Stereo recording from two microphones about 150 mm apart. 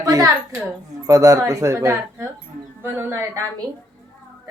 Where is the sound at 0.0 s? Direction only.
25° right (ahead or behind).